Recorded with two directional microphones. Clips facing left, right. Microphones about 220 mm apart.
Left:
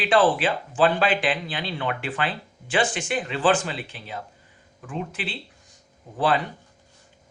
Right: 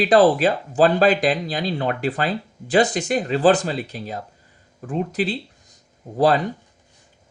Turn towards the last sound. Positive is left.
turn(degrees=-40)  # may be behind; listen again after turning